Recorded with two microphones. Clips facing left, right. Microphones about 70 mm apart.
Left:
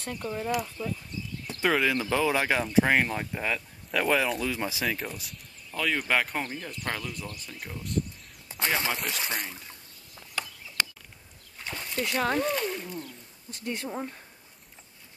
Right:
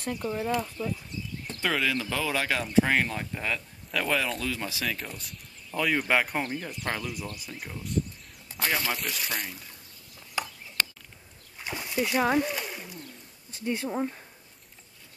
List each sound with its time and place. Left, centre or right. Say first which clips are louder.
0.2 s speech: even; centre
1.5 s speech: left 3 dB; centre
4.8 s speech: left 2 dB; centre
5.7 s speech: right 2 dB; centre
8.5 s speech: even; left
10.4 s a sound: right 3 dB; centre
11.5 s splash: right 3 dB; centre
13.7 s speech: right 4 dB; centre